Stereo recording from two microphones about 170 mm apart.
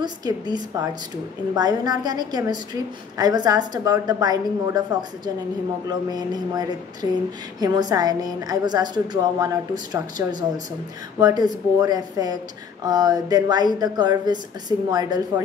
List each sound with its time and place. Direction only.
0.0 s a woman's voice: 25° right (ahead or behind)
11.1 s a woman's voice: 25° right (ahead or behind)